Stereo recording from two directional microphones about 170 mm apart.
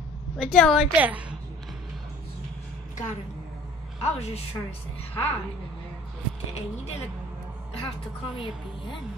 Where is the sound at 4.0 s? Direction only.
40° left (ahead or behind).